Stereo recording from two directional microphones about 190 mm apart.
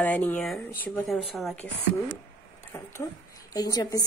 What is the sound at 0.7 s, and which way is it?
A woman's voice, 10° left (ahead or behind).